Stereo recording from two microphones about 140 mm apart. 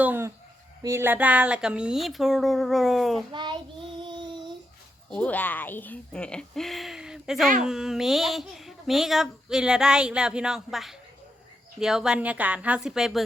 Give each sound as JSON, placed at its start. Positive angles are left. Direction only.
{"t": 0.0, "sound": "a sound", "side_deg": -15}
{"t": 0.8, "sound": "a child's voice", "side_deg": -20}
{"t": 4.0, "sound": "child singing", "side_deg": -35}
{"t": 5.0, "sound": "a child's voice", "side_deg": 10}